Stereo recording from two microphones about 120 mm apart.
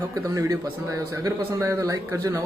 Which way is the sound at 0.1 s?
30° right (ahead or behind).